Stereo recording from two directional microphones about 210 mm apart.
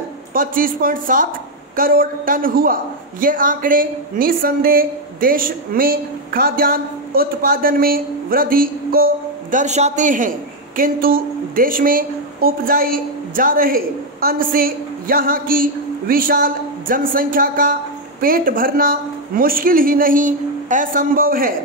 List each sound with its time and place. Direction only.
0.3 s a man's voice: 40° right (ahead or behind)